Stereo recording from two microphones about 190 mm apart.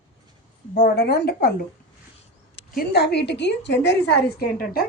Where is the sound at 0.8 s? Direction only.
55° left (ahead or behind).